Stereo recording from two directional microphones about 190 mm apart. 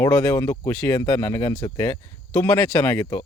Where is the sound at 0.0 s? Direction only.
15° left (ahead or behind).